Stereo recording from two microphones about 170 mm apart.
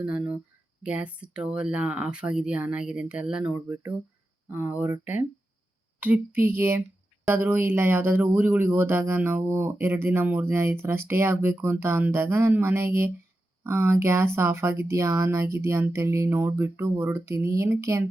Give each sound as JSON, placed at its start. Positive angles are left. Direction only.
{"t": 0.0, "sound": "speech", "side_deg": -10}